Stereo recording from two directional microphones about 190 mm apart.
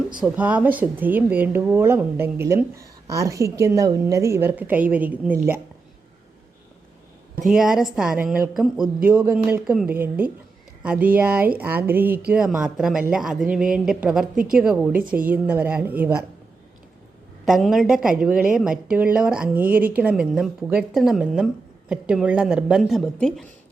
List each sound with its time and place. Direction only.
0.2 s speech: 5° right (ahead or behind)
7.4 s a woman's voice: centre (ahead or behind)
17.4 s a woman's voice: centre (ahead or behind)